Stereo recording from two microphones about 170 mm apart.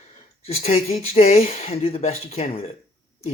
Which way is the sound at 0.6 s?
35° left (ahead or behind).